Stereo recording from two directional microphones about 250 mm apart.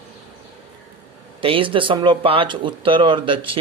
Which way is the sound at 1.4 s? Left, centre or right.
Right.